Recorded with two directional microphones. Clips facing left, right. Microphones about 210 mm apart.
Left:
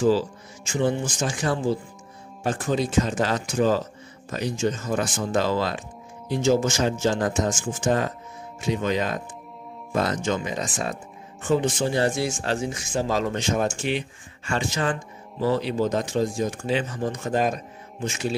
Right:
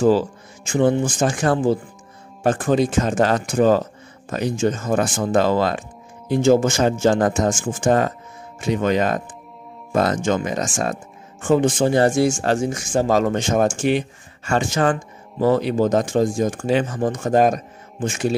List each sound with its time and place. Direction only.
0.0 s speech: 55° right (ahead or behind)